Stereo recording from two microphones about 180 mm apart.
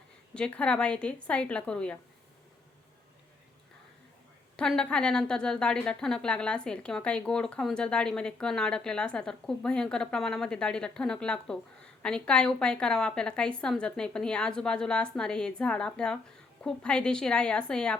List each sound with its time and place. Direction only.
0.3 s a woman's voice: 5° left (ahead or behind)
4.5 s a woman's voice: 5° left (ahead or behind)